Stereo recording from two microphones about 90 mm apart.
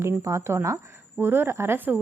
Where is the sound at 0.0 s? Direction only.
35° right (ahead or behind).